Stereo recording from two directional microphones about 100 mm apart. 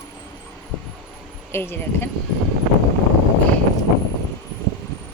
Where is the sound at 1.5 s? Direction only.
25° left (ahead or behind).